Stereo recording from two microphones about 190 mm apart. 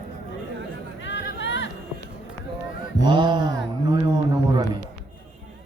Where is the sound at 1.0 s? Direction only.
70° left (ahead or behind).